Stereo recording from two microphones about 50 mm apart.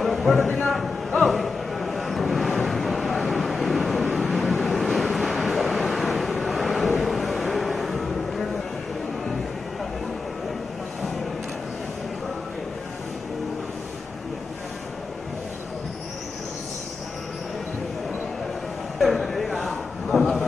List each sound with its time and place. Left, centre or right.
0.4 s a man's voice: left
1.2 s vehicle: centre
18.9 s a sound: centre